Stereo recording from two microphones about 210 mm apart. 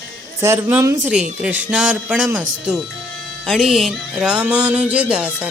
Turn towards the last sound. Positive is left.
turn(degrees=-5)  # may be behind; listen again after turning